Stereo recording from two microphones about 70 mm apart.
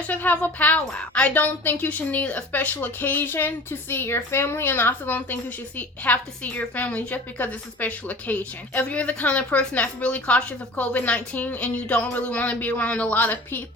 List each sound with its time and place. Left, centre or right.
0.1 s a woman's voice: left